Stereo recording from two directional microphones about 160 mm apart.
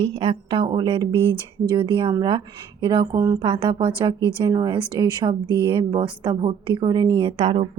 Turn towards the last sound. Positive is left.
turn(degrees=-40)  # may be behind; listen again after turning